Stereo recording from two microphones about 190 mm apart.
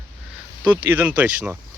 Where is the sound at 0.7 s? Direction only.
10° right (ahead or behind).